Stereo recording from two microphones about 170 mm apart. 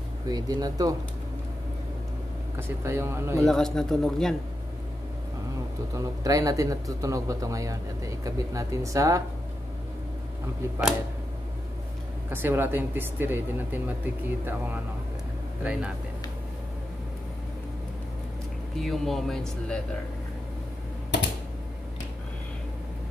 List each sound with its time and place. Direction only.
0.3 s a man's voice: 25° right (ahead or behind)
2.8 s speech: 15° right (ahead or behind)
3.4 s speech: 5° left (ahead or behind)
5.9 s a man's voice: 20° right (ahead or behind)
12.3 s speech: 15° right (ahead or behind)
18.8 s speech: centre (ahead or behind)